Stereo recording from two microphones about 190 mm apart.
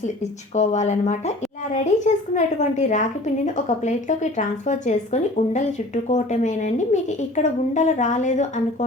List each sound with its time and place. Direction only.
0.5 s a woman's voice: 35° left (ahead or behind)